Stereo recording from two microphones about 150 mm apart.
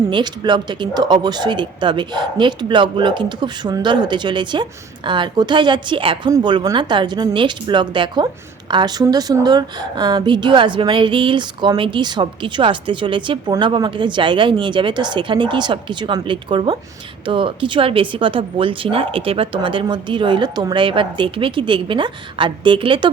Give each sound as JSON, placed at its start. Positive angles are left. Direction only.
{"t": 0.1, "sound": "a woman's voice", "side_deg": -30}